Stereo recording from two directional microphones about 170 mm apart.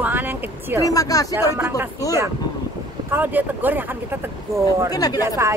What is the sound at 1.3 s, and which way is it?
Speech, 15° right (ahead or behind).